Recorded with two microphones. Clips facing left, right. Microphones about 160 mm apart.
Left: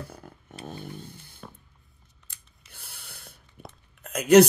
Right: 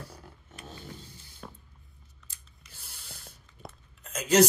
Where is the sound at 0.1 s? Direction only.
55° left (ahead or behind).